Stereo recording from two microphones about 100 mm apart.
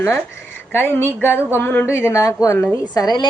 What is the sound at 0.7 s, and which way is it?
A woman's voice, 25° left (ahead or behind).